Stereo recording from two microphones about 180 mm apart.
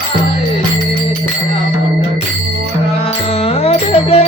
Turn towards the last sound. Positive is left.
turn(degrees=35)  # may be behind; listen again after turning